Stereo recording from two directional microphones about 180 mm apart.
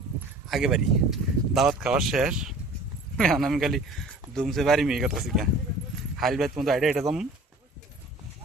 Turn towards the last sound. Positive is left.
turn(degrees=0)  # may be behind; listen again after turning